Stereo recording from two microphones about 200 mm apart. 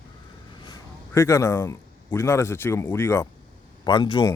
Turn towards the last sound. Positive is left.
turn(degrees=20)  # may be behind; listen again after turning